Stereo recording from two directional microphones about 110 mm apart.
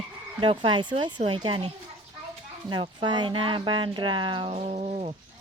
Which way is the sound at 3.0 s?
45° right (ahead or behind).